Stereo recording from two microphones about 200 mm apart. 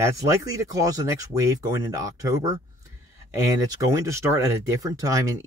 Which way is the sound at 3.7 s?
15° right (ahead or behind).